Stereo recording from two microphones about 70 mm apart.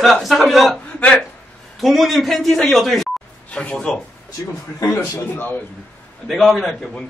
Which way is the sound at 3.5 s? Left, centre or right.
Centre.